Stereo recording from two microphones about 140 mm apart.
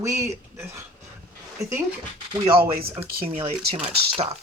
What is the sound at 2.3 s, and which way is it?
Speech, 35° right (ahead or behind).